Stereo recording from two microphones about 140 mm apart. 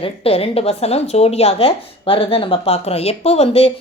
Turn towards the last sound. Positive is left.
turn(degrees=45)  # may be behind; listen again after turning